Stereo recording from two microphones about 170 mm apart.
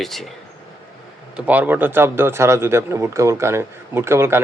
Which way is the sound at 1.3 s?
10° right (ahead or behind).